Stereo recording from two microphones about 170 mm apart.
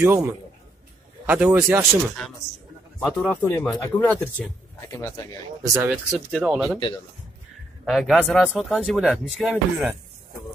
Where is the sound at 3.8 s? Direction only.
10° left (ahead or behind).